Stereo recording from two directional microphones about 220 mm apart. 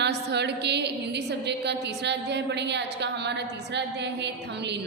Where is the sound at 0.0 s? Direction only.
50° right (ahead or behind).